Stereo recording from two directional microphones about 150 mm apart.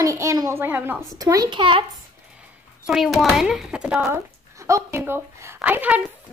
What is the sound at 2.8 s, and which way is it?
Speech, centre (ahead or behind).